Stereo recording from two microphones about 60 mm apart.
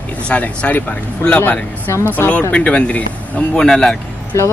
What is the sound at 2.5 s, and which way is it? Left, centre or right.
Speech, left.